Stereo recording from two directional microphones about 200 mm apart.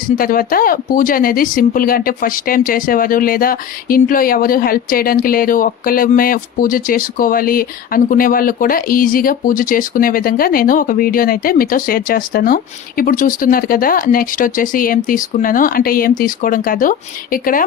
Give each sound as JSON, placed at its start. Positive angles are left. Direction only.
{"t": 0.2, "sound": "speech", "side_deg": 45}